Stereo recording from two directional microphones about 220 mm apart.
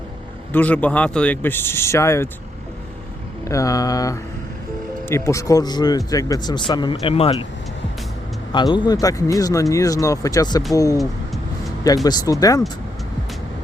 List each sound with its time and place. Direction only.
0.5 s speech: 5° left (ahead or behind)
3.5 s speech: 15° left (ahead or behind)
8.5 s speech: 20° left (ahead or behind)